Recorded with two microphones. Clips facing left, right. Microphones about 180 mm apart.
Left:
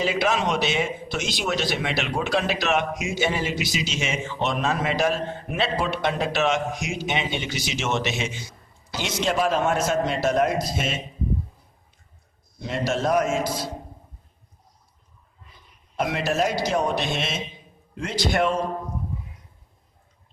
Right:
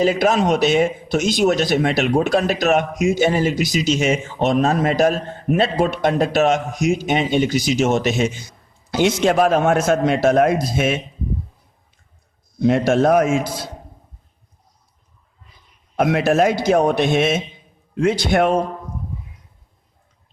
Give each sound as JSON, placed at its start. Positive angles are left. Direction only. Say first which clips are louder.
{"t": 0.0, "sound": "speech", "louder": "right 7 dB", "side_deg": -45}
{"t": 8.9, "sound": "a man's voice", "louder": "right 9 dB", "side_deg": -55}
{"t": 12.6, "sound": "a man's voice", "louder": "right 10 dB", "side_deg": -55}
{"t": 16.0, "sound": "a man's voice", "louder": "right 8 dB", "side_deg": -55}